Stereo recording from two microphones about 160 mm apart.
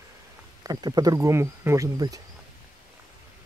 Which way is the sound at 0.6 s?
25° right (ahead or behind).